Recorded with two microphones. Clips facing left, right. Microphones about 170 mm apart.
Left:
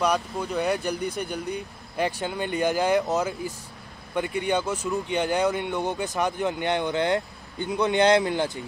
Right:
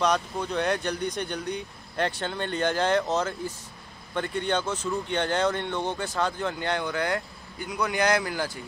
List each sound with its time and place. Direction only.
0.0 s speech: 5° left (ahead or behind); by 8.6 s 20° left (ahead or behind)